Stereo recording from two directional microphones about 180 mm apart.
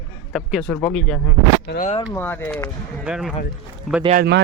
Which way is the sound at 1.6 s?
60° left (ahead or behind).